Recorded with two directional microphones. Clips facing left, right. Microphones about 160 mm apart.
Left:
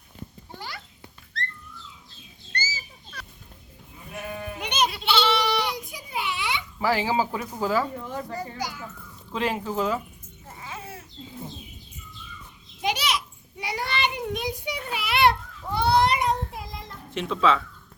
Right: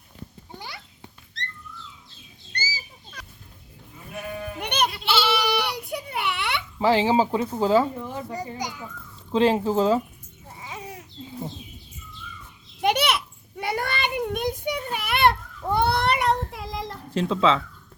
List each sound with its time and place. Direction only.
2.5 s chicken: 10° right (ahead or behind)
4.6 s goat: 60° right (ahead or behind)
4.9 s goat: centre (ahead or behind)
5.7 s a sound: 65° right (ahead or behind)
6.7 s a child's voice: 25° right (ahead or behind)
10.6 s a sound: 15° right (ahead or behind)
12.8 s child singing: 60° right (ahead or behind); by 16.9 s 80° right
17.2 s a child's voice: 25° right (ahead or behind)